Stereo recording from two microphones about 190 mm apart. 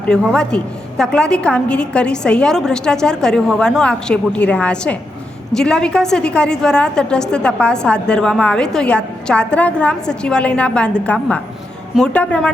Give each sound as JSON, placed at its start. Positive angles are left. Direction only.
{"t": 0.1, "sound": "a woman's voice", "side_deg": 5}